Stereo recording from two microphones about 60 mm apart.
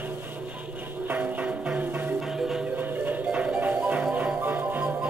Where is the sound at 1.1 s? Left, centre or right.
Right.